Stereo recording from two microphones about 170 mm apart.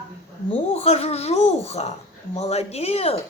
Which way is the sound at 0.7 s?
35° left (ahead or behind).